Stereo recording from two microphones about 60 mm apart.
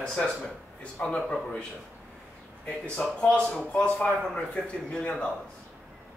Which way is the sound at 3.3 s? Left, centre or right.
Centre.